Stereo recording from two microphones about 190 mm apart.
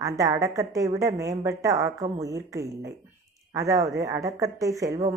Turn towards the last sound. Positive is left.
turn(degrees=-15)  # may be behind; listen again after turning